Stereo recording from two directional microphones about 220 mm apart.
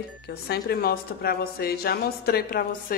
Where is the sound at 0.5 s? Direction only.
45° left (ahead or behind).